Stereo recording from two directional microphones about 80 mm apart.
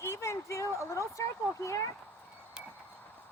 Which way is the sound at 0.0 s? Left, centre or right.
Left.